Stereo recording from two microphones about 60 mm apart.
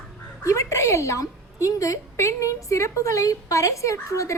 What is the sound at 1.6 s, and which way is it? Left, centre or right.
A woman's voice, left.